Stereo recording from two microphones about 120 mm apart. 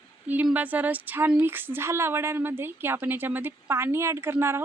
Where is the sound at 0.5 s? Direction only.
15° right (ahead or behind).